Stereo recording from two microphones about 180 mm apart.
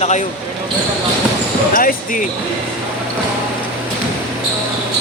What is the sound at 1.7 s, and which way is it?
Speech, 50° left (ahead or behind).